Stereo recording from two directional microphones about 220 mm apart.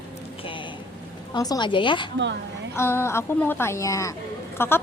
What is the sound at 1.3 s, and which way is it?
Speech, 20° left (ahead or behind).